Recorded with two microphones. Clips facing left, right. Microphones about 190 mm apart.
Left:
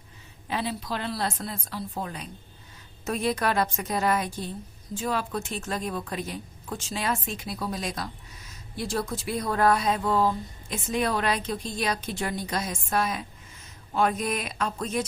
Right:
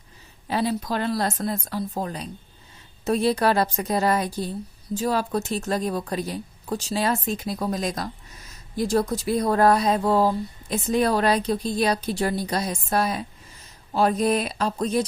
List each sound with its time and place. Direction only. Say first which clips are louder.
0.4 s a woman's voice: right 6 dB; 40° right (ahead or behind)